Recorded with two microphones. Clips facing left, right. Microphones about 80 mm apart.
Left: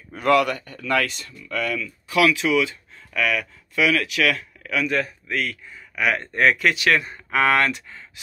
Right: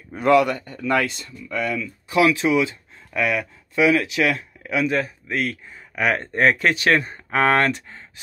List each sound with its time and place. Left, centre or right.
0.1 s speech: right